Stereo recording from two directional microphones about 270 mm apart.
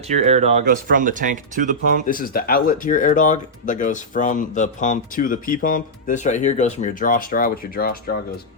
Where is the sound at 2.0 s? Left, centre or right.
Left.